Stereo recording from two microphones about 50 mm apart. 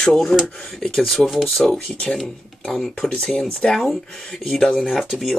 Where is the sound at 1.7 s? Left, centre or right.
Centre.